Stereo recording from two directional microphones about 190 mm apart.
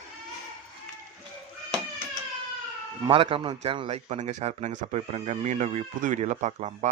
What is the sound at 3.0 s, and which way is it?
A man's voice, 30° right (ahead or behind).